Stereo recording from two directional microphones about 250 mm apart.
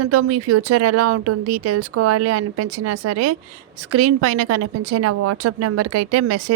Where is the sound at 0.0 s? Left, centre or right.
Right.